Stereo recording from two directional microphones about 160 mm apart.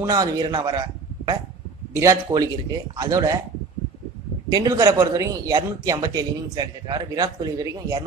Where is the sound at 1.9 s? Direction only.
20° right (ahead or behind).